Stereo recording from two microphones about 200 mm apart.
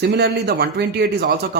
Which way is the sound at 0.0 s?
55° right (ahead or behind).